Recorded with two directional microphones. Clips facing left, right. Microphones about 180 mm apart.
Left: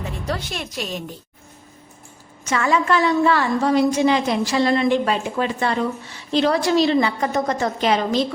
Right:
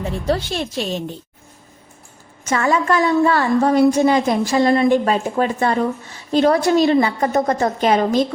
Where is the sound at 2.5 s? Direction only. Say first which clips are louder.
Right 2 dB; 45° right (ahead or behind).